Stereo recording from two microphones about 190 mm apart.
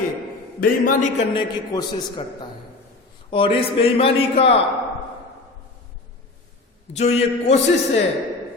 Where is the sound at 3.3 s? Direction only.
25° left (ahead or behind).